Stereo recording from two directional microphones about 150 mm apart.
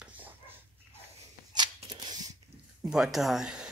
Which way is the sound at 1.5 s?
30° right (ahead or behind).